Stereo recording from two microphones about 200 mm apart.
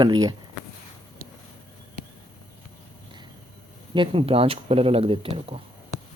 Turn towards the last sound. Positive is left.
turn(degrees=-30)  # may be behind; listen again after turning